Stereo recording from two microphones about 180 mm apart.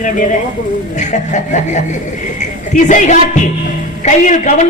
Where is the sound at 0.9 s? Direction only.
40° left (ahead or behind).